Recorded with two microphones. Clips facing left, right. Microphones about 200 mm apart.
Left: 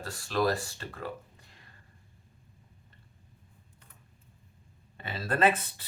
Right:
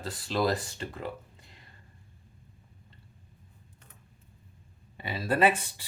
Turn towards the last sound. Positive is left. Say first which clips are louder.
# right 1 dB
turn(degrees=-10)  # may be behind; listen again after turning